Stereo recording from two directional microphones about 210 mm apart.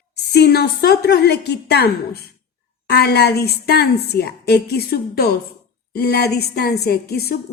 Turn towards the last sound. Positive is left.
turn(degrees=50)  # may be behind; listen again after turning